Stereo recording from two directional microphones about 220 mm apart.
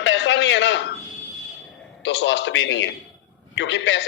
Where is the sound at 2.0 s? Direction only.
55° left (ahead or behind).